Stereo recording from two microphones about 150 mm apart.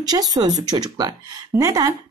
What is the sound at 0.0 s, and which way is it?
A woman's voice, 25° right (ahead or behind).